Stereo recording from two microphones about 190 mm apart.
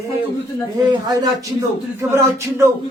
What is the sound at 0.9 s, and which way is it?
Speech, 20° right (ahead or behind).